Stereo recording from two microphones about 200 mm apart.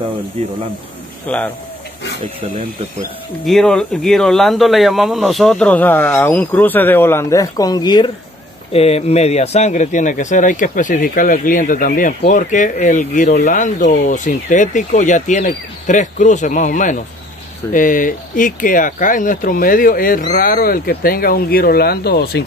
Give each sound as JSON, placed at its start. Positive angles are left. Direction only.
{"t": 1.2, "sound": "speech", "side_deg": 10}
{"t": 3.4, "sound": "speech", "side_deg": 5}